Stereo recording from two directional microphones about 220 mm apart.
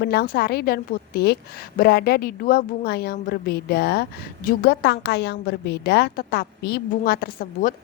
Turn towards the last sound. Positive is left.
turn(degrees=40)  # may be behind; listen again after turning